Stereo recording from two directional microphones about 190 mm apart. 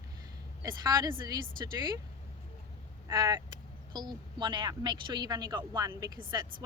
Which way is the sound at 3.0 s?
20° right (ahead or behind).